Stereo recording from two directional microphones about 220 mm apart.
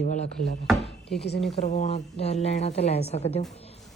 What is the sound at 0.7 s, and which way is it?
Chopping, centre (ahead or behind).